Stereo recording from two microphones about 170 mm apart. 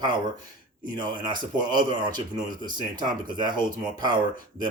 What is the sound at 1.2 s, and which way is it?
Speech, 25° right (ahead or behind).